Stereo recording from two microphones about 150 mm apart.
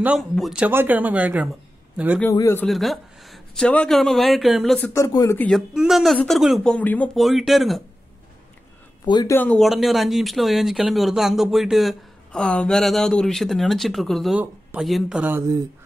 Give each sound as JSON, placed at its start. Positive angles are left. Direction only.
{"t": 0.2, "sound": "speech", "side_deg": 0}
{"t": 2.3, "sound": "speech", "side_deg": 20}
{"t": 2.6, "sound": "speech", "side_deg": 0}
{"t": 4.9, "sound": "speech", "side_deg": 20}
{"t": 5.8, "sound": "speech", "side_deg": 0}
{"t": 7.2, "sound": "speech", "side_deg": 0}
{"t": 9.0, "sound": "speech", "side_deg": 25}
{"t": 9.4, "sound": "speech", "side_deg": 5}